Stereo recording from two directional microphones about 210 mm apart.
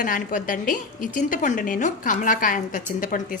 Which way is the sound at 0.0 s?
40° left (ahead or behind).